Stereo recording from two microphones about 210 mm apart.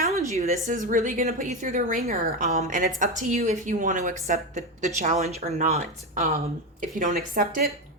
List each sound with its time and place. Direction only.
0.0 s a woman's voice: 35° right (ahead or behind)